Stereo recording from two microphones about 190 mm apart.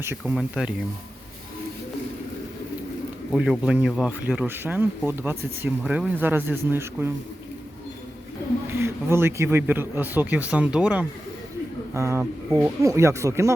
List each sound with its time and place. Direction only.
0.0 s speech: 10° right (ahead or behind)
3.3 s speech: 5° right (ahead or behind)
8.7 s speech: 15° right (ahead or behind)